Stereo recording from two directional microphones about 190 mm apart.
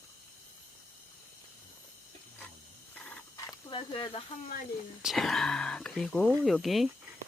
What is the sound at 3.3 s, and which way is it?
Snake, 25° left (ahead or behind).